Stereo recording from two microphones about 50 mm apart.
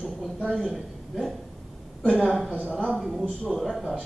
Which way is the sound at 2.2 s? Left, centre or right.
Centre.